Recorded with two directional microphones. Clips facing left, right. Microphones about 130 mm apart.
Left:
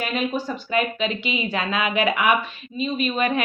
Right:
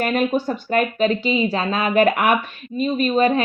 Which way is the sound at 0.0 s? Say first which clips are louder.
Right 5 dB; 50° right (ahead or behind).